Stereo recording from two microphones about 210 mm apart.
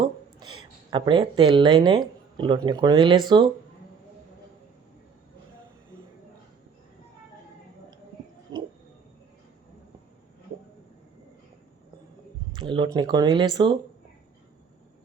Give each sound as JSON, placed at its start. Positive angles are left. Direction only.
{"t": 0.0, "sound": "a woman's voice", "side_deg": -20}
{"t": 12.5, "sound": "speech", "side_deg": -25}